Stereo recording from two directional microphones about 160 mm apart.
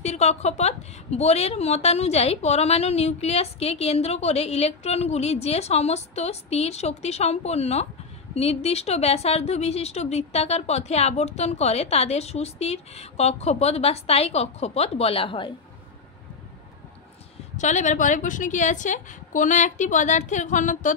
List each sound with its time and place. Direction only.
0.0 s a woman's voice: 45° left (ahead or behind)
17.6 s a woman's voice: 50° left (ahead or behind)